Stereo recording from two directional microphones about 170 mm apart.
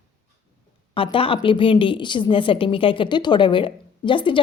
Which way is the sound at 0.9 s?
30° left (ahead or behind).